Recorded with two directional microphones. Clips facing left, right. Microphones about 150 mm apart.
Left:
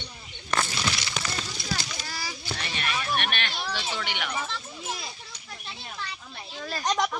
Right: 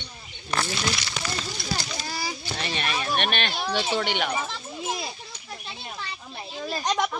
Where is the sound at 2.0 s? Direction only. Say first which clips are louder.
Right 4 dB; 25° right (ahead or behind).